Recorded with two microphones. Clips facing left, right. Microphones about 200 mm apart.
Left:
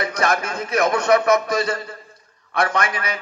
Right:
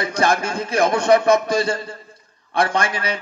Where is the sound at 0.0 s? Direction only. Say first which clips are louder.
Right 2 dB; 30° right (ahead or behind).